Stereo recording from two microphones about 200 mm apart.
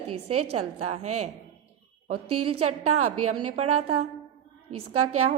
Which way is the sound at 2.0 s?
90° right.